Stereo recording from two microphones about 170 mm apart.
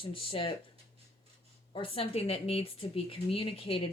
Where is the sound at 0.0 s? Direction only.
30° left (ahead or behind).